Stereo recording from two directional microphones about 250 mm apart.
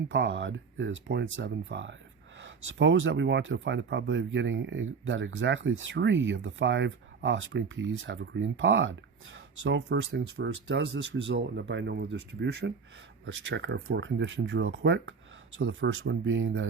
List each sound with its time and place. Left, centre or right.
0.1 s speech: right